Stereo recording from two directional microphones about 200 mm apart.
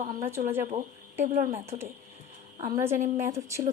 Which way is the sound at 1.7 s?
35° right (ahead or behind).